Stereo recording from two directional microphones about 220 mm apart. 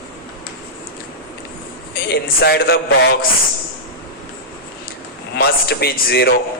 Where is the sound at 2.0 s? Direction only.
45° left (ahead or behind).